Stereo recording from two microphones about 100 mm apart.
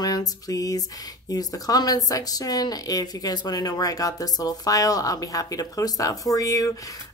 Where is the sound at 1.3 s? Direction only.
40° left (ahead or behind).